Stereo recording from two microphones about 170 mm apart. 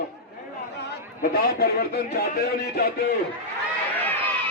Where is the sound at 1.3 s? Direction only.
65° left (ahead or behind).